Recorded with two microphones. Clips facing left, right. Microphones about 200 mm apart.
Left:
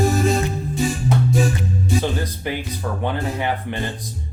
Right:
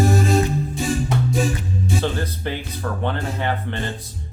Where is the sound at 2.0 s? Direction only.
10° left (ahead or behind).